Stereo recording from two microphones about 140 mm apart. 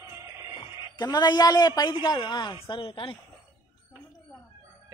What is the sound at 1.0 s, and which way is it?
A man's voice, 30° left (ahead or behind).